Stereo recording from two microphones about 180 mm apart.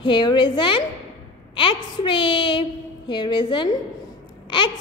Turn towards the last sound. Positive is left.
turn(degrees=25)  # may be behind; listen again after turning